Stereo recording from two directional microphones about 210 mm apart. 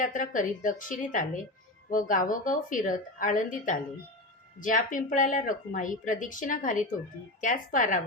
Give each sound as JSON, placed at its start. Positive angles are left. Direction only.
{"t": 0.0, "sound": "speech", "side_deg": 40}